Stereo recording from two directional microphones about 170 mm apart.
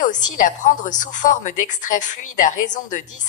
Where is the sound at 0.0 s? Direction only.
50° left (ahead or behind).